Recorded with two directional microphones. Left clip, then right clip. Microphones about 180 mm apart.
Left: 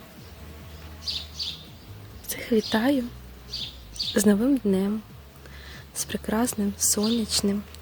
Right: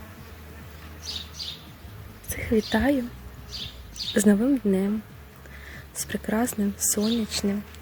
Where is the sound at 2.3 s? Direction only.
5° left (ahead or behind).